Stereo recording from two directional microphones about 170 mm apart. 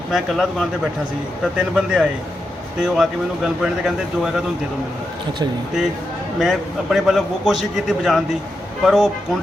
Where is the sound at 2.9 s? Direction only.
5° right (ahead or behind).